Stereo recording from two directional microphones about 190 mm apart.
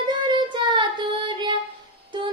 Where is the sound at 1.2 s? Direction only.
25° right (ahead or behind).